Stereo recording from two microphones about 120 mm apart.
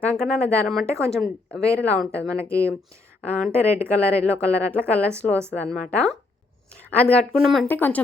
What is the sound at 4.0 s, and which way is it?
A woman's voice, 10° left (ahead or behind).